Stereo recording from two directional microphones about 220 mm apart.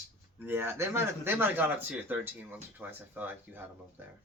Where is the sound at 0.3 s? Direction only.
10° right (ahead or behind).